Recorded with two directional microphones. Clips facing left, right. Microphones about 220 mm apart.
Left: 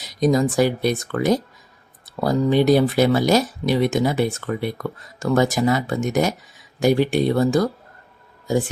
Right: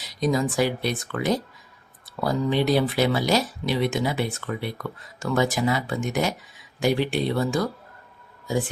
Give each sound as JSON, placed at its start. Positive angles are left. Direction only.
{"t": 0.0, "sound": "speech", "side_deg": 45}